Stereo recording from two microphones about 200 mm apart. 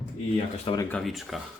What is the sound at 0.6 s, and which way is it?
Speech, 20° left (ahead or behind).